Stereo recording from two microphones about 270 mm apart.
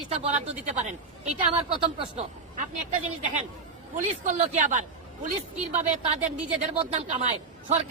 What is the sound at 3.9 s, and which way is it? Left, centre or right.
Speech, right.